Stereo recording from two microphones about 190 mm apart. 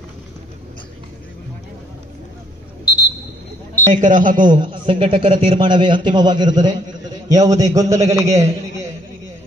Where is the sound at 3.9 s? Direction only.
40° right (ahead or behind).